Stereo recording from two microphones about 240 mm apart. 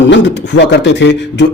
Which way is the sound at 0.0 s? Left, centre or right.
Left.